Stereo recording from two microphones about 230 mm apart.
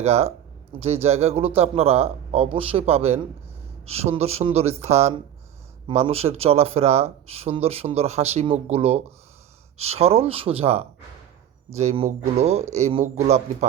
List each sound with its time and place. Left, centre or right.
0.0 s speech: right